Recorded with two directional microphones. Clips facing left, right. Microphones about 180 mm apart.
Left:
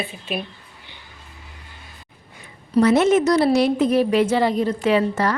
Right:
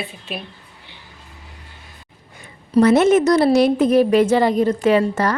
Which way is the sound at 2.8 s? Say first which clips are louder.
Right 3 dB; 50° right (ahead or behind).